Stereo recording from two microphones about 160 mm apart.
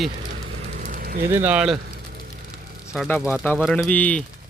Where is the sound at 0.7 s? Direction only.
50° right (ahead or behind).